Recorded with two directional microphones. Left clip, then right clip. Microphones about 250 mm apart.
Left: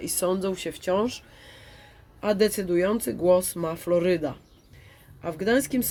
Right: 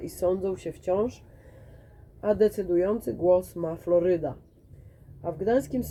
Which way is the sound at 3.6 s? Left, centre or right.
Left.